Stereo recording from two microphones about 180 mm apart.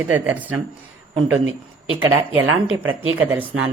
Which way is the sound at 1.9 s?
90° right.